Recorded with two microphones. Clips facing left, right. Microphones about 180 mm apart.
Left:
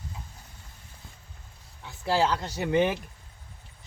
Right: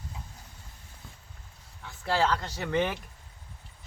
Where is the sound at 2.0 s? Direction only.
5° left (ahead or behind).